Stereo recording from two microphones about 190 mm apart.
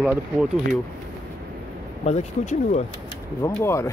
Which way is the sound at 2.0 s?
35° left (ahead or behind).